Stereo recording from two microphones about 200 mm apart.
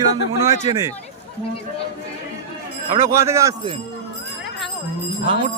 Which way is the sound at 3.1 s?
15° right (ahead or behind).